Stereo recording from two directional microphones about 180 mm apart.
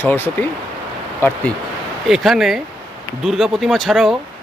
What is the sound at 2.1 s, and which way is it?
Speech, centre (ahead or behind).